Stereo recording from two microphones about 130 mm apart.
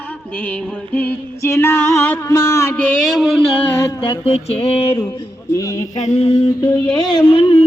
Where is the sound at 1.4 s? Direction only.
20° left (ahead or behind).